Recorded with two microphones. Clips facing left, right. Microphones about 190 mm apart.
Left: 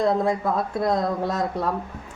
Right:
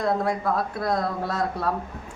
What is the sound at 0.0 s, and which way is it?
Speech, 25° left (ahead or behind).